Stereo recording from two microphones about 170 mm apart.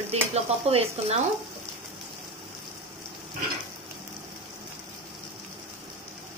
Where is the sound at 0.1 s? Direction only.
35° right (ahead or behind).